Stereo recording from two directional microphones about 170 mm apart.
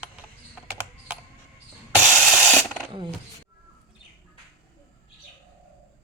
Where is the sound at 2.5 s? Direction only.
5° right (ahead or behind).